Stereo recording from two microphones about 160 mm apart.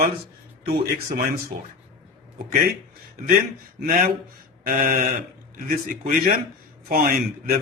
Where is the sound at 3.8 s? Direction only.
60° right (ahead or behind).